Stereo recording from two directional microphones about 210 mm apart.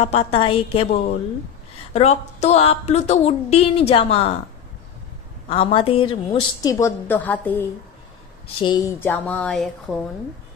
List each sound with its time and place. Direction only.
0.0 s a woman's voice: 30° left (ahead or behind)
5.5 s a woman's voice: 25° left (ahead or behind); by 7.6 s 10° left (ahead or behind)
8.5 s a woman's voice: 20° left (ahead or behind)
9.0 s speech: 10° left (ahead or behind)